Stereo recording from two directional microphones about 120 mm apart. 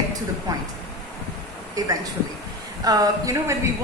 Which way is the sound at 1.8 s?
30° right (ahead or behind).